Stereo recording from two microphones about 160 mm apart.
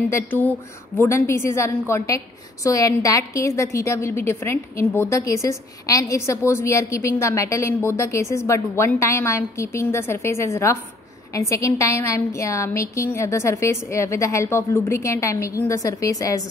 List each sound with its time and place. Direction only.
0.0 s a woman's voice: 10° left (ahead or behind)